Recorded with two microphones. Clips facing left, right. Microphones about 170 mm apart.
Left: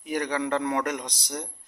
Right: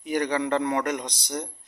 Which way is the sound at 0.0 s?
5° left (ahead or behind).